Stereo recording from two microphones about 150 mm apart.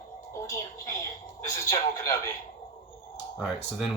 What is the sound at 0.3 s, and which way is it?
Speech, 20° left (ahead or behind).